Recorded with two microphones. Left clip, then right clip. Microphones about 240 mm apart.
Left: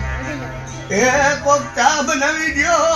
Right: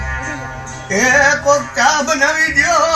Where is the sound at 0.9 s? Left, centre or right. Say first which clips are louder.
Right 3 dB; right.